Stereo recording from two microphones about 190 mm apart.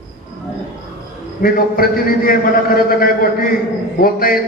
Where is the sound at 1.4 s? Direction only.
50° left (ahead or behind).